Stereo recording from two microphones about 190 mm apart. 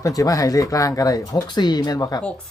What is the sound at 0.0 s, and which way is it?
Speech, 20° left (ahead or behind).